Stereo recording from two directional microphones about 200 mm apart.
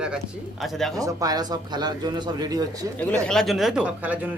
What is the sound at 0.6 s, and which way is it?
Speech, centre (ahead or behind).